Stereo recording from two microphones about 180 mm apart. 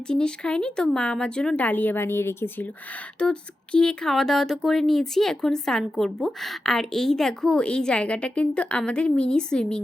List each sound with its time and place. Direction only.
0.1 s speech: 5° left (ahead or behind)